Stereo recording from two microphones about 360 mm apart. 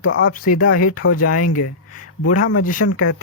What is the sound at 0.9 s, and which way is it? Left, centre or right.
Speech, left.